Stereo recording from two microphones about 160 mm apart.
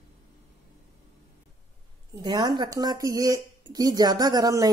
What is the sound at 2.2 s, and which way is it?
A woman's voice, 25° right (ahead or behind).